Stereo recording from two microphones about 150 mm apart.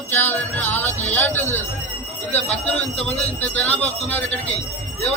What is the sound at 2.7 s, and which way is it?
Speech, 45° left (ahead or behind).